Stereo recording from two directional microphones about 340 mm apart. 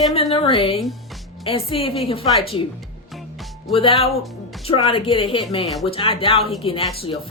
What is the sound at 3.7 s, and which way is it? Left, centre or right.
Speech, centre.